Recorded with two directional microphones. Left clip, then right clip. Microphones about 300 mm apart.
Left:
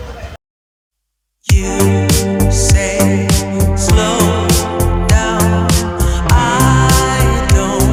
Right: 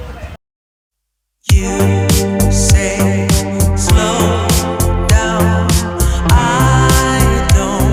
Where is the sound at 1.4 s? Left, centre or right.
Centre.